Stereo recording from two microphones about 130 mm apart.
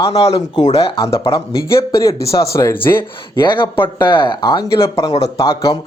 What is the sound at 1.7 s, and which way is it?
Speech, 25° left (ahead or behind).